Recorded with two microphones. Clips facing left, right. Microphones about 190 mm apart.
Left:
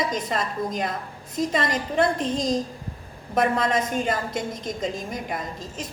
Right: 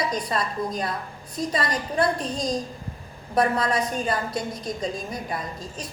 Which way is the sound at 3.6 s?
25° left (ahead or behind).